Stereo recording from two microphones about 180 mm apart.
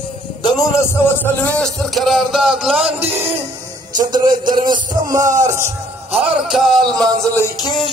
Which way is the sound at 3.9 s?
25° right (ahead or behind).